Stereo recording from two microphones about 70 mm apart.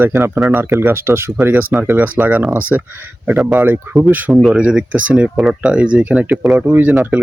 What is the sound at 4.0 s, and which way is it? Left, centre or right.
Speech, right.